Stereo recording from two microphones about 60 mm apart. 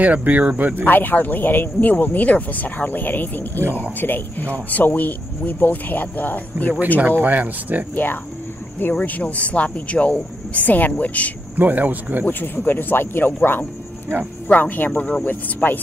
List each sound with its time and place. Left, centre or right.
0.0 s speech: right
0.8 s speech: left
7.1 s speech: right
7.9 s speech: left
11.5 s speech: right
12.3 s speech: left